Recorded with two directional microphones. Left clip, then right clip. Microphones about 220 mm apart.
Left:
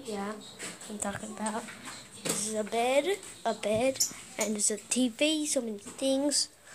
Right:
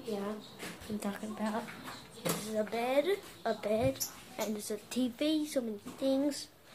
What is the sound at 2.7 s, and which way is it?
A woman's voice, 20° left (ahead or behind).